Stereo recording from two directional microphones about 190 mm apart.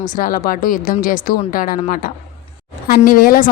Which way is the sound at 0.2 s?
45° left (ahead or behind).